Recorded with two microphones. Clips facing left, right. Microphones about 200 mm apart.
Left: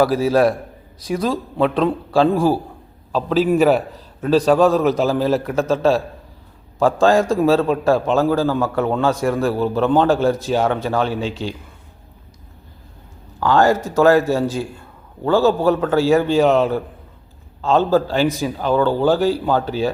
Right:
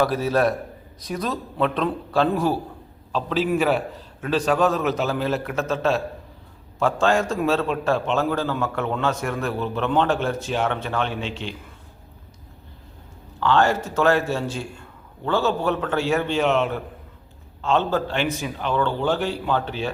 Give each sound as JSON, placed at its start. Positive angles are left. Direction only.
{"t": 0.3, "sound": "a man's voice", "side_deg": 35}
{"t": 13.4, "sound": "a man's voice", "side_deg": 40}